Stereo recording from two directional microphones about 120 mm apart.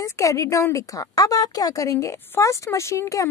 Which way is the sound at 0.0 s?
25° left (ahead or behind).